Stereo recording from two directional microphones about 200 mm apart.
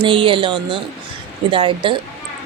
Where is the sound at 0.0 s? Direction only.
25° right (ahead or behind).